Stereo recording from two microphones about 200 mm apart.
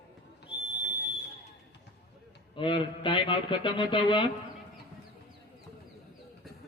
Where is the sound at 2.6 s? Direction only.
25° left (ahead or behind).